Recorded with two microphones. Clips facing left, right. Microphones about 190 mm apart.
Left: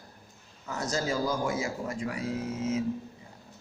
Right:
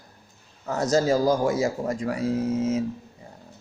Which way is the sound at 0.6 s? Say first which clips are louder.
Right 9 dB; 40° right (ahead or behind).